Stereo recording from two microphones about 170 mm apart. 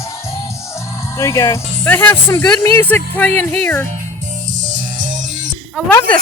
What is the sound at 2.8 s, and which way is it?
Speech, 10° left (ahead or behind).